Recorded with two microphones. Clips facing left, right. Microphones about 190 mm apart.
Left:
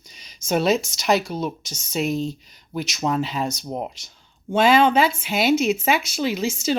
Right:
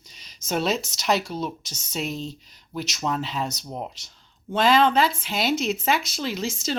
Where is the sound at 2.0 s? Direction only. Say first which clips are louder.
Left 7 dB; 45° left (ahead or behind).